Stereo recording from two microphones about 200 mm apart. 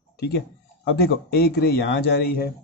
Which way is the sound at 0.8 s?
55° left (ahead or behind).